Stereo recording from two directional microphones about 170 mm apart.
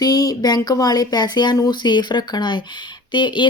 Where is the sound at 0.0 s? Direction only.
20° left (ahead or behind).